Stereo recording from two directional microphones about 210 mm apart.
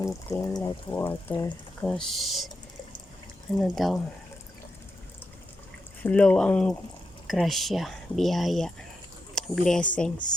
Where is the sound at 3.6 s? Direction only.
Centre (ahead or behind).